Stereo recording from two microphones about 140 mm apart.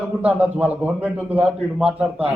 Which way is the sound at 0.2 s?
10° right (ahead or behind).